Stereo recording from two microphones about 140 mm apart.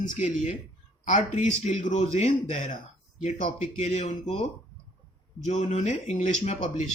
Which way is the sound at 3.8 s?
50° left (ahead or behind).